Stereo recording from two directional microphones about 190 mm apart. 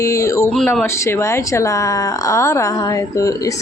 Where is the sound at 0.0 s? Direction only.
15° left (ahead or behind).